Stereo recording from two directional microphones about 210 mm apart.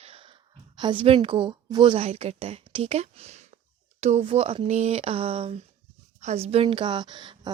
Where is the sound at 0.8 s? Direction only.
25° right (ahead or behind).